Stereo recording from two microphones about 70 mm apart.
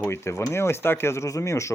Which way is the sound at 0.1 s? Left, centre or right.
Left.